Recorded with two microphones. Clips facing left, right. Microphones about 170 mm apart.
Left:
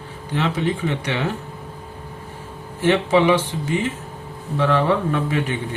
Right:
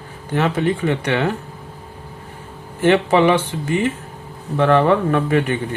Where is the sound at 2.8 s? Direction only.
55° right (ahead or behind).